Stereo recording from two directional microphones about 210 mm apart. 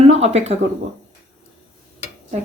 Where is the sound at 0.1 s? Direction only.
30° right (ahead or behind).